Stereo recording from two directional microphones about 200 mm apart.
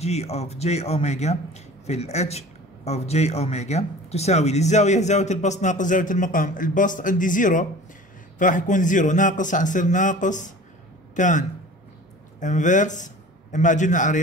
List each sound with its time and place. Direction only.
0.0 s a man's voice: 30° left (ahead or behind)